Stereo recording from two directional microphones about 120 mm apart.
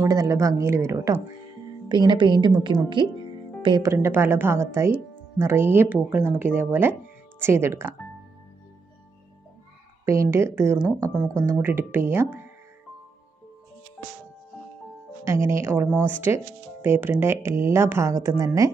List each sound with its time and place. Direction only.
0.0 s speech: 30° right (ahead or behind)
1.9 s a woman's voice: 40° right (ahead or behind)
3.8 s speech: 20° right (ahead or behind)
10.0 s speech: 25° right (ahead or behind)
15.2 s speech: 25° right (ahead or behind)